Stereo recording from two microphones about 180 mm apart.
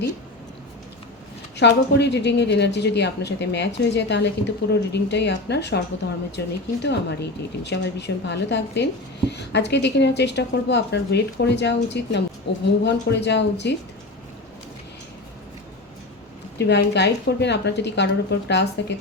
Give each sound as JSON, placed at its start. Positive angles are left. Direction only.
{"t": 1.5, "sound": "a woman's voice", "side_deg": 70}
{"t": 16.6, "sound": "a woman's voice", "side_deg": 70}